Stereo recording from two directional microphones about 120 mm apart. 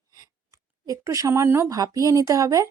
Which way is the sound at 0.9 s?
25° right (ahead or behind).